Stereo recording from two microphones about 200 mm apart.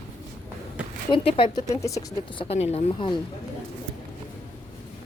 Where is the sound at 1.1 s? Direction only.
25° left (ahead or behind).